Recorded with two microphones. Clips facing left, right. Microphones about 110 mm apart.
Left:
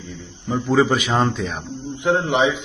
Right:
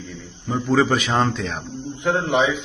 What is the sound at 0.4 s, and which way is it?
A man's voice, centre (ahead or behind).